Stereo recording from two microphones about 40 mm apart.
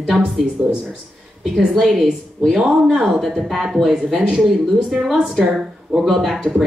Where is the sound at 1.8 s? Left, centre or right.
Centre.